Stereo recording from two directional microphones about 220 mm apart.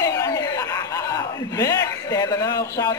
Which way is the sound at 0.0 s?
15° left (ahead or behind).